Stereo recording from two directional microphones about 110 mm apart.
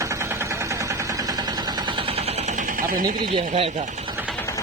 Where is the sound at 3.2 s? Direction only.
55° right (ahead or behind).